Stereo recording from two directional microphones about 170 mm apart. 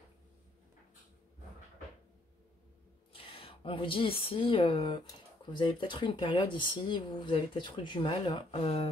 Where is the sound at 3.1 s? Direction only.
35° left (ahead or behind).